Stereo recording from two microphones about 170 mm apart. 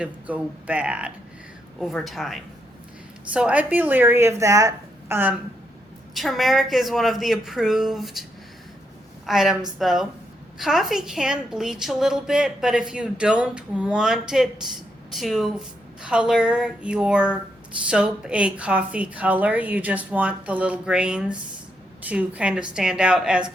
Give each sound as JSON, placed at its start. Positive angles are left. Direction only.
{"t": 0.0, "sound": "a woman's voice", "side_deg": -5}
{"t": 6.1, "sound": "a woman's voice", "side_deg": 0}
{"t": 9.2, "sound": "a woman's voice", "side_deg": 0}